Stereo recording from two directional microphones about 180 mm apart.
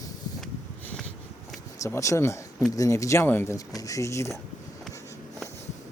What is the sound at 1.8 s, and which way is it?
Speech, 15° left (ahead or behind).